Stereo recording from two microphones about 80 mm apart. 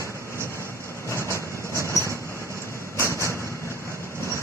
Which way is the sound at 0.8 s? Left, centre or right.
Left.